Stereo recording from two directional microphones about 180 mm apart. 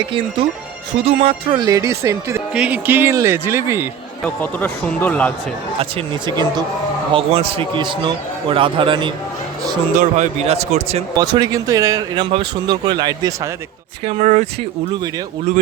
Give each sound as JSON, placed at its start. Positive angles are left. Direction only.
{"t": 0.9, "sound": "speech", "side_deg": -30}
{"t": 2.5, "sound": "speech", "side_deg": -5}
{"t": 4.2, "sound": "speech", "side_deg": 10}
{"t": 5.8, "sound": "speech", "side_deg": -25}
{"t": 9.9, "sound": "speech", "side_deg": -45}
{"t": 11.3, "sound": "speech", "side_deg": -20}
{"t": 14.0, "sound": "speech", "side_deg": -35}